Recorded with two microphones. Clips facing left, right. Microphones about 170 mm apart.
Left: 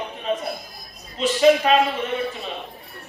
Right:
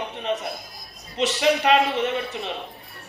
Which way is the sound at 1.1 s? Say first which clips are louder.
Left 5 dB; 75° right (ahead or behind).